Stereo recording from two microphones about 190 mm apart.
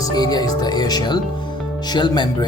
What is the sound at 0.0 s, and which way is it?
Speech, 20° left (ahead or behind).